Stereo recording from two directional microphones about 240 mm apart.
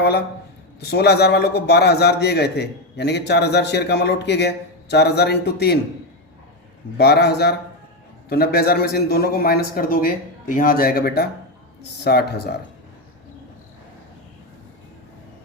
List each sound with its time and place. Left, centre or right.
0.8 s a man's voice: left
6.9 s a man's voice: left